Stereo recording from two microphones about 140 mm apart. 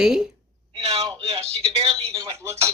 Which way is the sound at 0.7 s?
45° right (ahead or behind).